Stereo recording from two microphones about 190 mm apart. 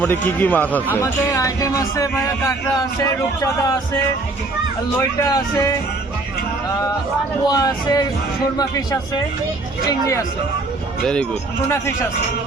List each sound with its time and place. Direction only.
0.0 s speech: 10° left (ahead or behind)
5.2 s speech: 15° left (ahead or behind)
7.4 s speech: 20° left (ahead or behind)
11.0 s speech: 5° left (ahead or behind)